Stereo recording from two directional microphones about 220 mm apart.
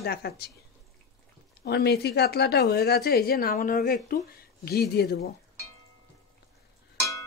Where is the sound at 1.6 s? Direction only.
45° left (ahead or behind).